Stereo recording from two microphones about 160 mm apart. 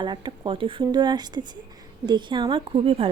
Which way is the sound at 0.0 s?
30° right (ahead or behind).